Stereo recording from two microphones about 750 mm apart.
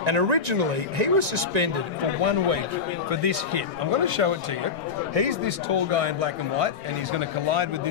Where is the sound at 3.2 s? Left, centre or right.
Right.